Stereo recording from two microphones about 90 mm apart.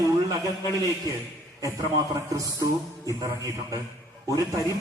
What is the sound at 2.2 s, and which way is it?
A man's voice, 40° right (ahead or behind).